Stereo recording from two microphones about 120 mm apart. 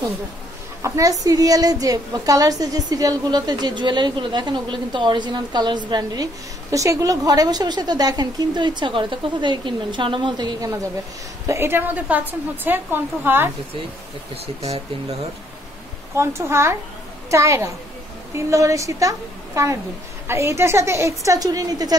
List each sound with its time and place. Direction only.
0.8 s a woman's voice: 25° right (ahead or behind)
6.7 s a woman's voice: 25° right (ahead or behind)
11.4 s a woman's voice: 20° right (ahead or behind)
14.3 s speech: 60° right (ahead or behind)
16.2 s a woman's voice: 20° right (ahead or behind)